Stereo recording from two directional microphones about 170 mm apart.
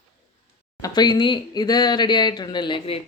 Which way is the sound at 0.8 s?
25° left (ahead or behind).